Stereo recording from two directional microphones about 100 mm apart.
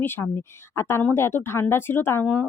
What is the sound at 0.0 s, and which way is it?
A woman's voice, 20° left (ahead or behind).